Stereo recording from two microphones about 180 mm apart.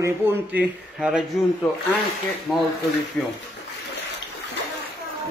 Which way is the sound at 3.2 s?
Centre (ahead or behind).